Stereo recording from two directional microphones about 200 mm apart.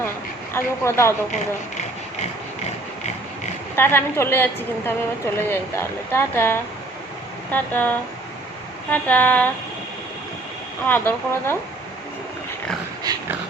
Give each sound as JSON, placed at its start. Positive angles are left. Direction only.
{"t": 0.5, "sound": "a woman's voice", "side_deg": 15}
{"t": 3.8, "sound": "a woman's voice", "side_deg": 10}
{"t": 10.8, "sound": "a woman's voice", "side_deg": 10}